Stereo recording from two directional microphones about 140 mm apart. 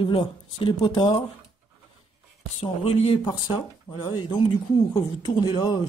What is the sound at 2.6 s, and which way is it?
Speech, 45° left (ahead or behind).